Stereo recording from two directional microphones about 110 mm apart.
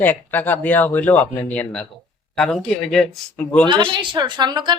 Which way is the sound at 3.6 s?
45° right (ahead or behind).